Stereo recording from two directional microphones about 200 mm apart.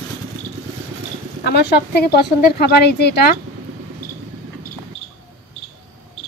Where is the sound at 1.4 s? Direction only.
55° left (ahead or behind).